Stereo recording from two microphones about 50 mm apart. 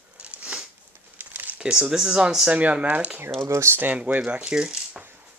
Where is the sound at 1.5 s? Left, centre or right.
Centre.